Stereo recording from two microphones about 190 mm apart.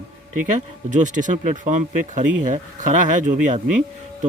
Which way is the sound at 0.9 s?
40° right (ahead or behind).